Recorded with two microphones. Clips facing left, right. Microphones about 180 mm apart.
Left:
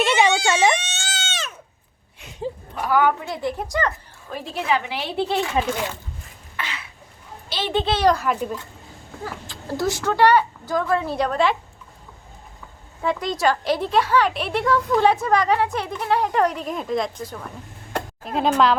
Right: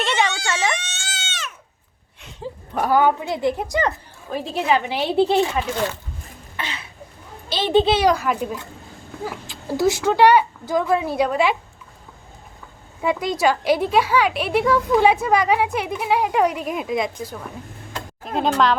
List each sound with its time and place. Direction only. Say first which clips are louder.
0.0 s a sound: left 4 dB; 5° left (ahead or behind)
0.9 s goat: left 4 dB; 30° left (ahead or behind)
2.4 s a sound: left 4 dB; 20° left (ahead or behind)
2.9 s a woman's voice: right 1 dB; 25° right (ahead or behind)
6.6 s throat clearing: right 1 dB; 25° right (ahead or behind)
7.5 s a child's voice: right 6 dB; 15° right (ahead or behind)
9.7 s a woman's voice: right 4 dB; 5° right (ahead or behind)
13.0 s a woman's voice: right 2 dB; 10° right (ahead or behind)
17.9 s a sound: left 6 dB; 65° left (ahead or behind)
18.3 s a child's voice: even; centre (ahead or behind)